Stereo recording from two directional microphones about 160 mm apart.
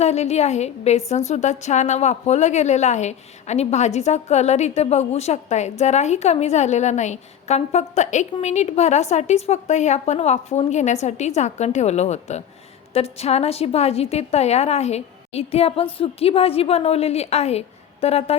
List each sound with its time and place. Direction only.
0.0 s a woman's voice: 45° left (ahead or behind)